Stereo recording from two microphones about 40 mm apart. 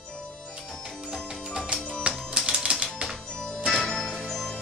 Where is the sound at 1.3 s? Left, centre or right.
Centre.